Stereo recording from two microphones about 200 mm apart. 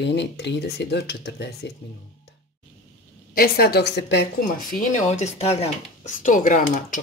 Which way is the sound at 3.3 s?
50° left (ahead or behind).